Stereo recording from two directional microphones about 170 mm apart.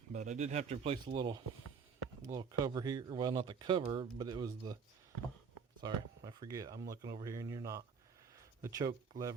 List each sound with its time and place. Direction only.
0.1 s speech: 45° right (ahead or behind)
1.0 s speech: 25° right (ahead or behind)
5.8 s speech: 20° right (ahead or behind)